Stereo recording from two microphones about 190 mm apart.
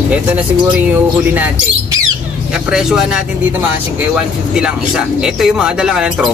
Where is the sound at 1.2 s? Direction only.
10° right (ahead or behind).